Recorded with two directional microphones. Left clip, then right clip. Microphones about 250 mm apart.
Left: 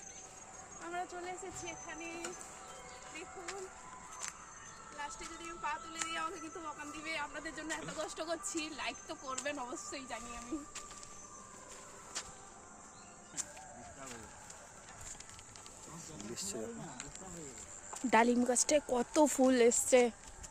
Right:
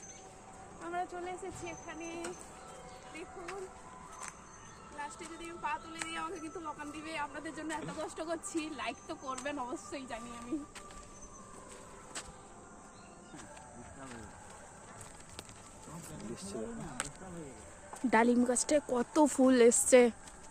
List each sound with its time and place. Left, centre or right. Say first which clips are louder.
0.9 s speech: right 3 dB; centre
4.9 s speech: right 1 dB; centre
16.3 s music: left 2 dB; left
18.1 s speech: right 1 dB; centre